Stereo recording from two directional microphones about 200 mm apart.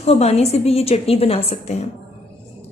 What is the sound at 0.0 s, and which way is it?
A woman's voice, 30° left (ahead or behind).